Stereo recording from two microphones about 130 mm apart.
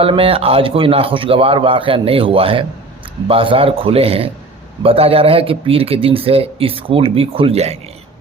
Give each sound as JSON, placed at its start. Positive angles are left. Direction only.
{"t": 0.0, "sound": "speech", "side_deg": -45}